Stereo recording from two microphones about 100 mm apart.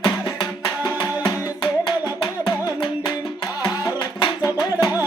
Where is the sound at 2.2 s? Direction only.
50° left (ahead or behind).